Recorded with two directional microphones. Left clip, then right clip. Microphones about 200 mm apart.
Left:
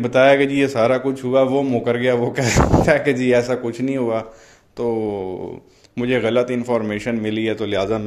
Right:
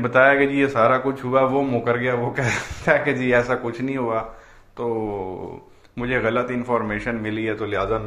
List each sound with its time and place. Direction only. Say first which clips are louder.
0.0 s a man's voice: left 2 dB; 40° left (ahead or behind)
5.9 s a man's voice: left 4 dB; 50° left (ahead or behind)